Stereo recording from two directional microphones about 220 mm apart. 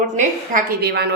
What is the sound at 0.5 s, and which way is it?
Speech, 45° right (ahead or behind).